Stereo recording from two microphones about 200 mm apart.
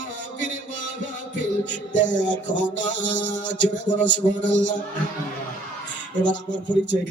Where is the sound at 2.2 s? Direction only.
65° left (ahead or behind).